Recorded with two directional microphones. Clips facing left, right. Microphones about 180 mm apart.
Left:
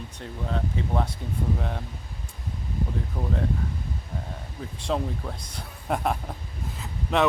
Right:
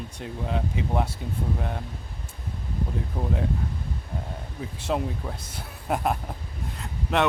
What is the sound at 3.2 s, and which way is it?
Speech, 25° right (ahead or behind).